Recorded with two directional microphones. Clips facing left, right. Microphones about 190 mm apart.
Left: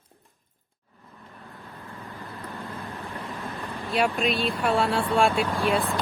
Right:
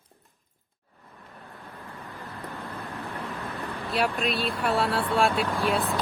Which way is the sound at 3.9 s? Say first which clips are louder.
Left 3 dB; centre (ahead or behind).